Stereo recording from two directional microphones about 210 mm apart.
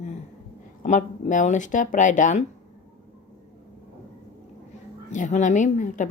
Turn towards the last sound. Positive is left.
turn(degrees=35)  # may be behind; listen again after turning